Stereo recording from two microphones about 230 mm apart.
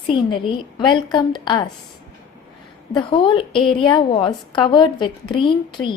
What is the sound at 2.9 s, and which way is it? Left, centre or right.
A woman's voice, left.